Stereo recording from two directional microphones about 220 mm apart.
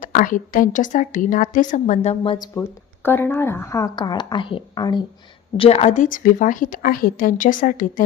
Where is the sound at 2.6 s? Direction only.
10° left (ahead or behind).